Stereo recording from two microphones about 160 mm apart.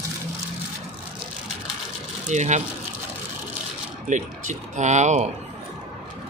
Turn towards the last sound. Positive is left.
turn(degrees=-45)  # may be behind; listen again after turning